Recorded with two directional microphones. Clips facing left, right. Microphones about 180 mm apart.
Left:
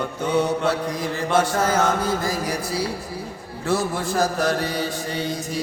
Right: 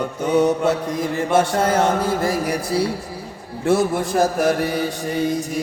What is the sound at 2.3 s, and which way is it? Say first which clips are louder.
Mantra: right 4 dB; 60° right (ahead or behind).